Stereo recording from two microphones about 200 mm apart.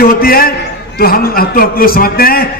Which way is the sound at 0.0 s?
50° left (ahead or behind).